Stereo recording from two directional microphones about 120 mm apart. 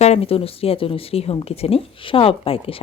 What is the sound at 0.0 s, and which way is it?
A woman's voice, 60° left (ahead or behind).